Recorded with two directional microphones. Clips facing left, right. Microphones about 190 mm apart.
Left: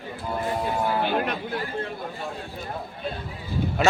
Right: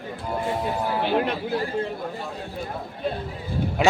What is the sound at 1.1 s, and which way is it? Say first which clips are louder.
Speech: right 3 dB; 30° right (ahead or behind).